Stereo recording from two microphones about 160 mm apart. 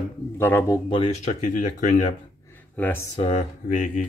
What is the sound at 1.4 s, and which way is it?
Speech, 50° left (ahead or behind).